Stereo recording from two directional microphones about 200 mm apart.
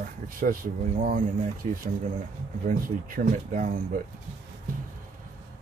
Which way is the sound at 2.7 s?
40° right (ahead or behind).